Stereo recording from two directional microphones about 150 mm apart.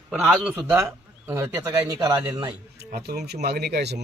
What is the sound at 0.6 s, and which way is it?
Speech, 20° right (ahead or behind).